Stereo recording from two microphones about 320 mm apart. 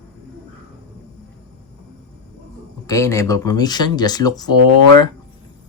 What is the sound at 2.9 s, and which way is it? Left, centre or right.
Speech, centre.